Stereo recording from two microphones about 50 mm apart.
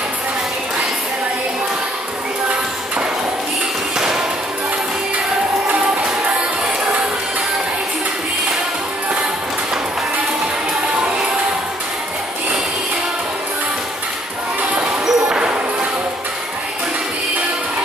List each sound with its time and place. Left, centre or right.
14.8 s music: centre